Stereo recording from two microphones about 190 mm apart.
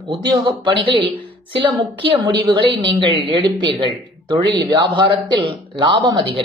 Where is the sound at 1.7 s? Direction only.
25° right (ahead or behind).